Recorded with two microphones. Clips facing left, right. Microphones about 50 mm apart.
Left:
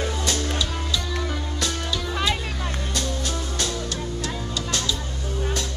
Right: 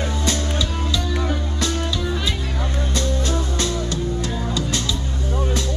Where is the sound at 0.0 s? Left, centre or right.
Right.